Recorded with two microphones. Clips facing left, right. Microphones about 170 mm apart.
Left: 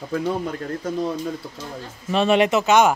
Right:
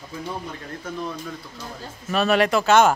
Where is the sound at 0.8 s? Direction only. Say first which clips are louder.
Left 5 dB; 35° left (ahead or behind).